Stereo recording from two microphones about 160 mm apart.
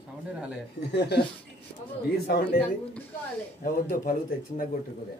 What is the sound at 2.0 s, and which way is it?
Speech, 75° left (ahead or behind).